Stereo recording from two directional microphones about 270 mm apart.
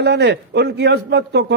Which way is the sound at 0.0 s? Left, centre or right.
Right.